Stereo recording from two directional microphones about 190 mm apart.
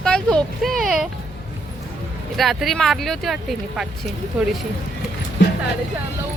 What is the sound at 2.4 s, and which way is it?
Speech, centre (ahead or behind).